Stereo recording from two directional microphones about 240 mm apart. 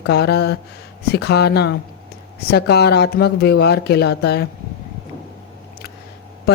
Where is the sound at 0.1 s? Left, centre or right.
Left.